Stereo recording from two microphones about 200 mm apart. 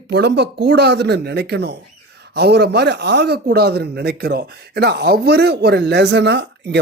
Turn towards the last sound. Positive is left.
turn(degrees=-55)  # may be behind; listen again after turning